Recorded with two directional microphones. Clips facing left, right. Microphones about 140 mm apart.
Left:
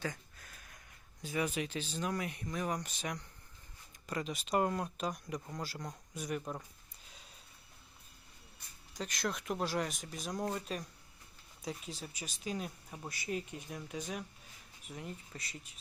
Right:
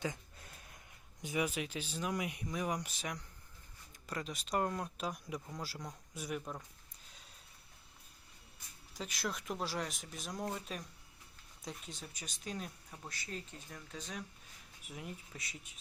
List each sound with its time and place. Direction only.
0.0 s a sound: 25° right (ahead or behind)
1.2 s speech: 15° right (ahead or behind)
1.5 s speech: 5° right (ahead or behind)
8.9 s speech: 5° right (ahead or behind)
14.8 s speech: 5° right (ahead or behind)